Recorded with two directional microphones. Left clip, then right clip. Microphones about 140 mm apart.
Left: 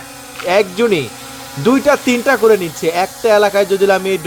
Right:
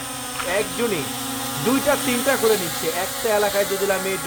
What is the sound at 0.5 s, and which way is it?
Speech, 40° left (ahead or behind).